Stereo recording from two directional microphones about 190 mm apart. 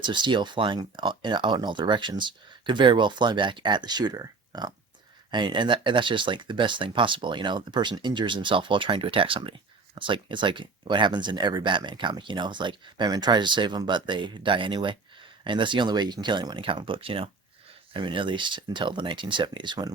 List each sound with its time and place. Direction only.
0.0 s speech: 25° right (ahead or behind)